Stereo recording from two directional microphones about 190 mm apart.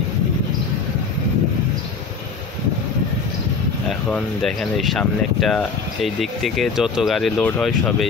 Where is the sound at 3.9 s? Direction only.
5° left (ahead or behind).